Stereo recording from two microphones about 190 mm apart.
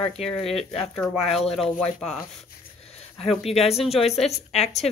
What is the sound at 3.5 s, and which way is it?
Speech, 30° left (ahead or behind).